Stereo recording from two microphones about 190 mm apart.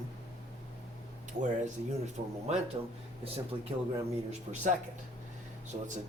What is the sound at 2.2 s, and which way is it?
Speech, 45° right (ahead or behind).